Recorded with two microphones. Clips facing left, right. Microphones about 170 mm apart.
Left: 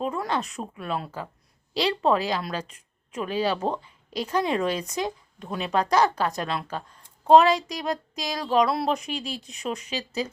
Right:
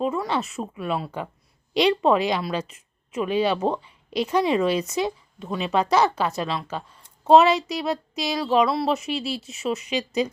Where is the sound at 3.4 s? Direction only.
10° right (ahead or behind).